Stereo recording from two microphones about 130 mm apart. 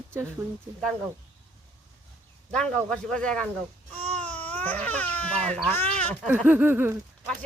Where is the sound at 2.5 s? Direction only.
5° left (ahead or behind).